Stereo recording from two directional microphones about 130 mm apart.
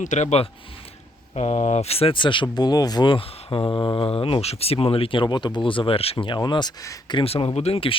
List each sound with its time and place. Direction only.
0.0 s speech: 65° left (ahead or behind); by 4.0 s 35° left (ahead or behind)
4.0 s speech: 45° left (ahead or behind)
7.3 s speech: 45° left (ahead or behind)